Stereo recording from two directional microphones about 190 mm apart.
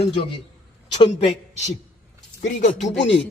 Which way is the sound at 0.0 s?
25° left (ahead or behind).